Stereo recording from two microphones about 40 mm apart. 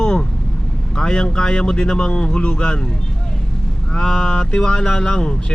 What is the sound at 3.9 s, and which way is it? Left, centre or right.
Speech, centre.